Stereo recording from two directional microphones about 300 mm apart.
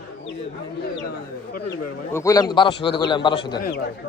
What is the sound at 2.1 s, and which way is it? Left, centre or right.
A man's voice, centre.